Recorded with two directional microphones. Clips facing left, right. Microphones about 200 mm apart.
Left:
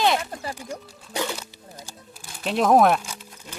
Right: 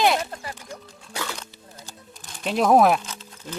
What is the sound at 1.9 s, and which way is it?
Music, centre (ahead or behind).